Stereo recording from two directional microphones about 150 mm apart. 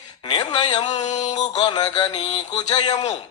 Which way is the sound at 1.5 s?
25° left (ahead or behind).